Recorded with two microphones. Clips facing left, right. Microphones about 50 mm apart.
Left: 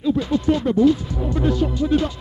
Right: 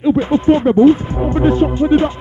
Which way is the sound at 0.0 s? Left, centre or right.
Right.